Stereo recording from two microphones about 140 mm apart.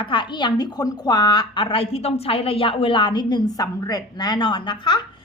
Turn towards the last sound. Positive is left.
turn(degrees=35)  # may be behind; listen again after turning